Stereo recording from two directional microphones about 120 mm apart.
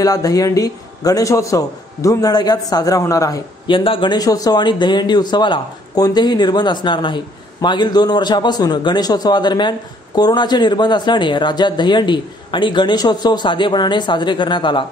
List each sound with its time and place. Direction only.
0.0 s a man's voice: 30° left (ahead or behind)
3.6 s a man's voice: 45° left (ahead or behind)